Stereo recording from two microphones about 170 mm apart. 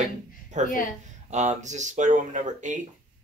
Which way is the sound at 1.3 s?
45° right (ahead or behind).